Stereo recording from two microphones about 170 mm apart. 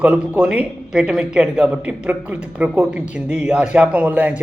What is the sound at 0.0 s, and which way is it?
Speech, 5° right (ahead or behind).